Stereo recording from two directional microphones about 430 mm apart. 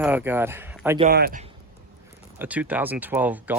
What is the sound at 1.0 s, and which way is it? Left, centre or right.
Speech, right.